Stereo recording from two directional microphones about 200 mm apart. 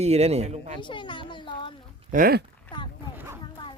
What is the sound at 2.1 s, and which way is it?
Speech, 45° right (ahead or behind).